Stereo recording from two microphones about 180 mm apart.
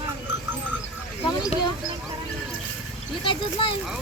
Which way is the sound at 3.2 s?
30° left (ahead or behind).